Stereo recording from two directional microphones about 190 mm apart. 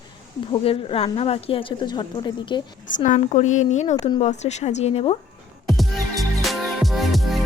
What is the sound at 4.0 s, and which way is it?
Speech, 25° left (ahead or behind).